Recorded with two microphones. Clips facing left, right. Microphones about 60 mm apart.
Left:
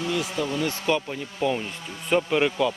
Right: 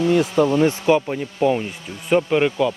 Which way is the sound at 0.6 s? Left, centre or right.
Right.